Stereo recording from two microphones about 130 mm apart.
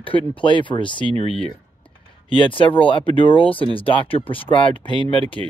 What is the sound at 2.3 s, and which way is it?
Speech, 40° left (ahead or behind).